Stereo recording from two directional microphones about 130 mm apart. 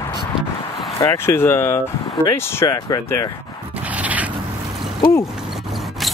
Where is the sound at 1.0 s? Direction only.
20° left (ahead or behind).